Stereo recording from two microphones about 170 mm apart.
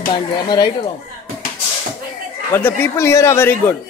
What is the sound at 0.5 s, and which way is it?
Speech, 25° left (ahead or behind).